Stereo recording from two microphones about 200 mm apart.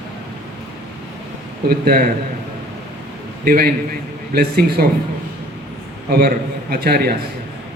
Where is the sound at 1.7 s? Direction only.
50° right (ahead or behind).